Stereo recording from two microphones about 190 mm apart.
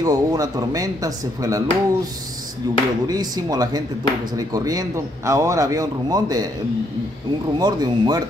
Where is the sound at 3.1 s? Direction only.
20° right (ahead or behind).